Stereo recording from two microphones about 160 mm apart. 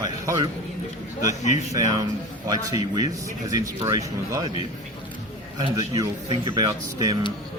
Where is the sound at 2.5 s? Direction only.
25° right (ahead or behind).